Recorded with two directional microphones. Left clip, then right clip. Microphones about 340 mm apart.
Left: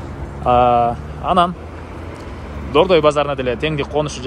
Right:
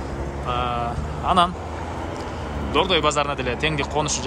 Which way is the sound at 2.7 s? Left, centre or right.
Centre.